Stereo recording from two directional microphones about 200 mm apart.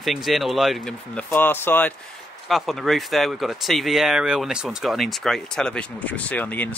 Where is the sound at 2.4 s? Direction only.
Centre (ahead or behind).